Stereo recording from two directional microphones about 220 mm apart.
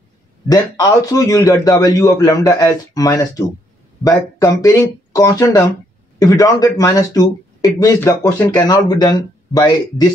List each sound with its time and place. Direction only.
0.5 s speech: 15° left (ahead or behind)